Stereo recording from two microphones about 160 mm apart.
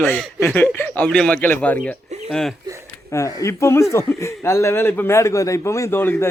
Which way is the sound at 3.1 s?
20° left (ahead or behind).